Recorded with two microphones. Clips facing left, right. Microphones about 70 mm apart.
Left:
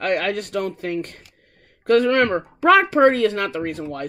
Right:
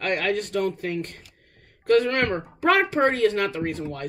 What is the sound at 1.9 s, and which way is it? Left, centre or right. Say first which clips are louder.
Speech: left 4 dB; left.